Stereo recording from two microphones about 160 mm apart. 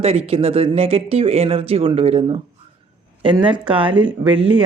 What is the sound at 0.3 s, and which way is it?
Speech, 35° right (ahead or behind).